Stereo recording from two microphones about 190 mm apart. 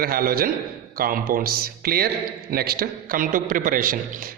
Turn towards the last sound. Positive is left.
turn(degrees=-45)  # may be behind; listen again after turning